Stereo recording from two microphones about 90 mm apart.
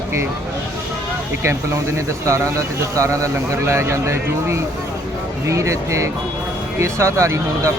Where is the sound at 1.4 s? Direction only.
30° right (ahead or behind).